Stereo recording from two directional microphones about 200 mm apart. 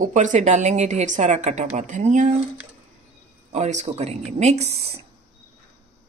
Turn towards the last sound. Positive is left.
turn(degrees=-30)  # may be behind; listen again after turning